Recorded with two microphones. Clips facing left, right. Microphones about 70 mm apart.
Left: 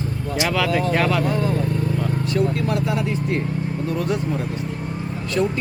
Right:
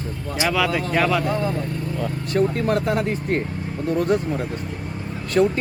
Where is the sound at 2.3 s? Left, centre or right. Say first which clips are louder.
Right 3 dB; right.